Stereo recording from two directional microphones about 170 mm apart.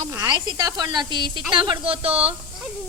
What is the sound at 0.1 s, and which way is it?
A woman's voice, 20° right (ahead or behind).